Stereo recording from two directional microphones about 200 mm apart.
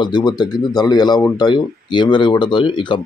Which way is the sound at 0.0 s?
20° left (ahead or behind).